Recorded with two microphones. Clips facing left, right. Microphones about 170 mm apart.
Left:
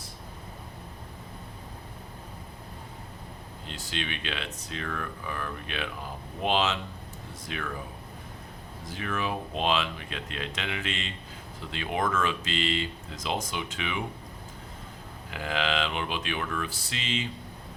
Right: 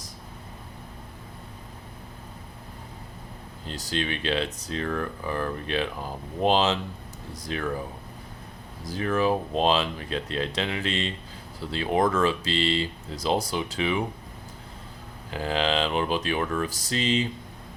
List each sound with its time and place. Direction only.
3.7 s speech: 40° right (ahead or behind)
8.8 s speech: 35° right (ahead or behind)
15.3 s speech: 35° right (ahead or behind)